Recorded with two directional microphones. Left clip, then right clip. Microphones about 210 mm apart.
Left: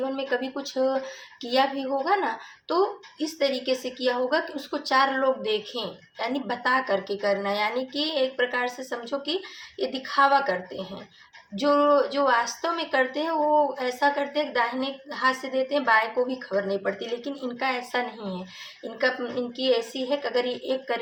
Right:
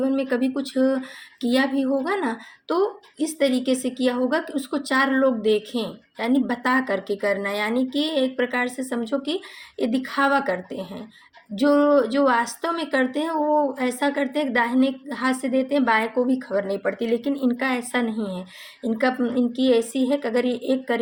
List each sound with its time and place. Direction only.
0.0 s speech: 45° right (ahead or behind)